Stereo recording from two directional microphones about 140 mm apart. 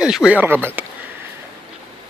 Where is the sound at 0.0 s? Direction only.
5° right (ahead or behind).